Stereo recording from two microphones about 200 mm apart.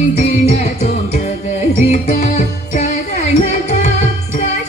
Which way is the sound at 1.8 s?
35° left (ahead or behind).